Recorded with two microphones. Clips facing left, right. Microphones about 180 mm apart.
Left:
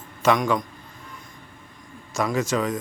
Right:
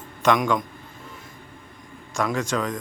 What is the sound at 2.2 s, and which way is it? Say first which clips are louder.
Speech: left 1 dB; 5° left (ahead or behind).